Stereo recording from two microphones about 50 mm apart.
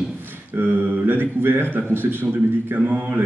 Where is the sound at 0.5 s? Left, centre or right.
Right.